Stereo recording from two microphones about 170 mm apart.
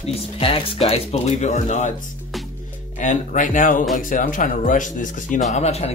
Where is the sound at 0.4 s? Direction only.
35° left (ahead or behind).